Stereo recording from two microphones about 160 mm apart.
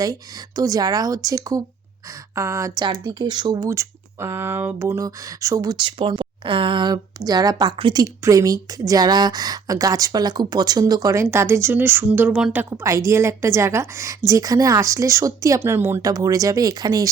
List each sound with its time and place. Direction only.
0.0 s a woman's voice: 20° right (ahead or behind)